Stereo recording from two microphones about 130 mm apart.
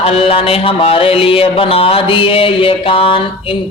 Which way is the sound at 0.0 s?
50° left (ahead or behind).